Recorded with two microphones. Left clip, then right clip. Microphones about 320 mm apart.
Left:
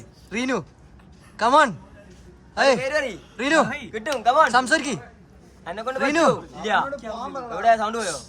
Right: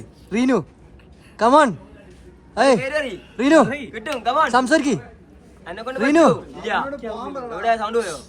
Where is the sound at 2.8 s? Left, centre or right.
Left.